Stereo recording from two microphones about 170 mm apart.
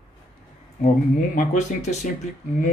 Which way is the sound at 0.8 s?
50° left (ahead or behind).